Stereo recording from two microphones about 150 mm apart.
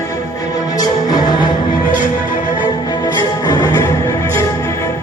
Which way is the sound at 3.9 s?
20° left (ahead or behind).